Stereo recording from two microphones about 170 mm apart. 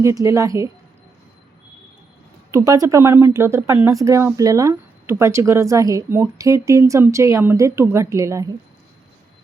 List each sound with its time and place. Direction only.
0.0 s a woman's voice: 20° right (ahead or behind)
2.5 s speech: 20° right (ahead or behind)